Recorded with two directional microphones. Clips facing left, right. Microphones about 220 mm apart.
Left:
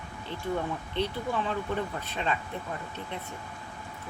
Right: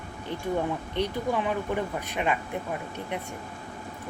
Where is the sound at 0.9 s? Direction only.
15° right (ahead or behind).